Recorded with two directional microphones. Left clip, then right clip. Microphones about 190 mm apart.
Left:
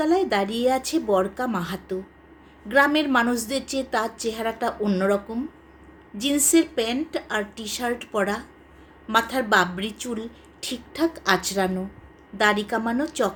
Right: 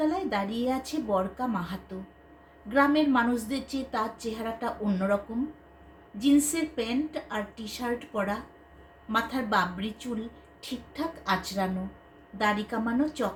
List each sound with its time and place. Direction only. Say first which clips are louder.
0.1 s a woman's voice: left 8 dB; 55° left (ahead or behind)